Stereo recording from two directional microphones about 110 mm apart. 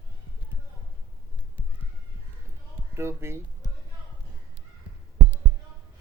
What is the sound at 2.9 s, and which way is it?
Speech, 25° right (ahead or behind).